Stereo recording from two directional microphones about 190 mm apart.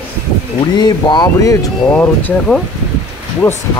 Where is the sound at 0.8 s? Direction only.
20° left (ahead or behind).